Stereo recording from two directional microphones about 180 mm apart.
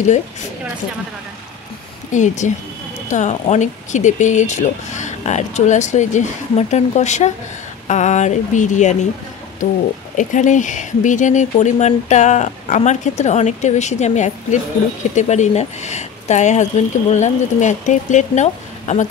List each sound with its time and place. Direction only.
2.1 s speech: 45° left (ahead or behind)
10.1 s speech: 45° left (ahead or behind)